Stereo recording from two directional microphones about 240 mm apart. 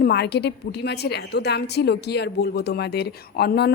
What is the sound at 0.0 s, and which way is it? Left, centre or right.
A woman's voice, left.